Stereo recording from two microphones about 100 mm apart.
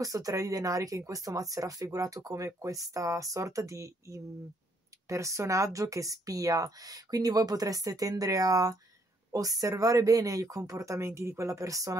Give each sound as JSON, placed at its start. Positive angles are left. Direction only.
{"t": 0.0, "sound": "speech", "side_deg": -35}